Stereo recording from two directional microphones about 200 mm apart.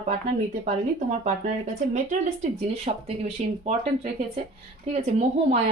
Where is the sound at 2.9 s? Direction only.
35° right (ahead or behind).